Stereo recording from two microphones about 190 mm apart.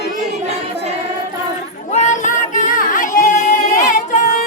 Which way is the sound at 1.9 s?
40° left (ahead or behind).